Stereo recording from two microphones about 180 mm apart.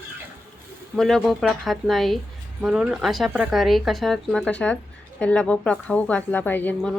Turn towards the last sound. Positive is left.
turn(degrees=10)  # may be behind; listen again after turning